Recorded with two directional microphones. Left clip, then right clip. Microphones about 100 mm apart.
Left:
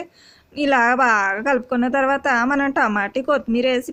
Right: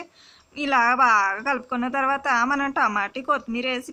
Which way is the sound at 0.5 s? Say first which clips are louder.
Left 3 dB; 55° left (ahead or behind).